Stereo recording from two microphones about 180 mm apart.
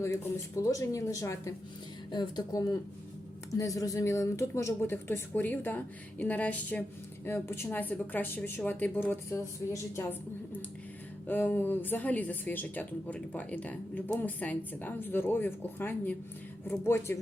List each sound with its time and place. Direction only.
0.7 s a woman's voice: 15° left (ahead or behind)